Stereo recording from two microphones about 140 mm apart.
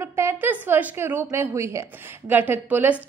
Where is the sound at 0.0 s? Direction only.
20° right (ahead or behind).